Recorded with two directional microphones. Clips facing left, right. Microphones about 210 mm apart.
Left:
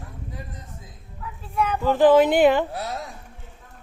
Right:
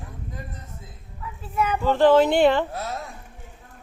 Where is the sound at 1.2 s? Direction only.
5° right (ahead or behind).